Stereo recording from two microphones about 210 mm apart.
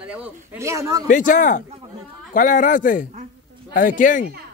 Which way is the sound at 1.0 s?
40° left (ahead or behind).